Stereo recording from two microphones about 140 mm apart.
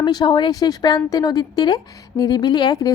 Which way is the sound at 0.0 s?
30° left (ahead or behind).